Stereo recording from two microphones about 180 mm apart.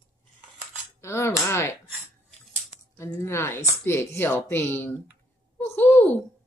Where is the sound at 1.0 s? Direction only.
15° left (ahead or behind).